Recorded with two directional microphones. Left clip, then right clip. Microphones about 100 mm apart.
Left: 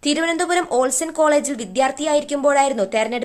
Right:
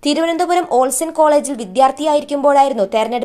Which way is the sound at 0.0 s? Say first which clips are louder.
Right 4 dB; 30° right (ahead or behind).